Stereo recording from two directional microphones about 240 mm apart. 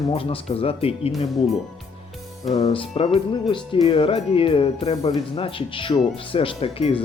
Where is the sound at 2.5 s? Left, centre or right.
Left.